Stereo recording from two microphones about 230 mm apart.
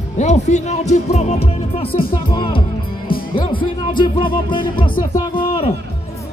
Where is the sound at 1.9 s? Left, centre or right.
Left.